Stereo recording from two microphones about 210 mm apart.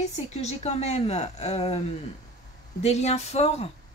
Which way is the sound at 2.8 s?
30° left (ahead or behind).